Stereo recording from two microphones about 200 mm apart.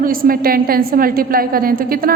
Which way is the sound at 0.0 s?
45° right (ahead or behind).